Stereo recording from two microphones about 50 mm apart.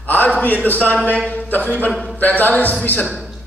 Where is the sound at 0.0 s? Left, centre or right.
Left.